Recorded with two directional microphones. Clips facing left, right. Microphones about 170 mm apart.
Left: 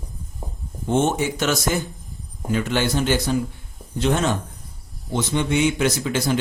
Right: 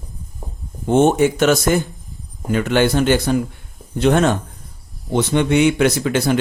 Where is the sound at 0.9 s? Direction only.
55° right (ahead or behind).